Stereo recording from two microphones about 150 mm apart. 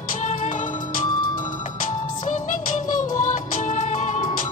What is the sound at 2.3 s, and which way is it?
Music, 55° left (ahead or behind).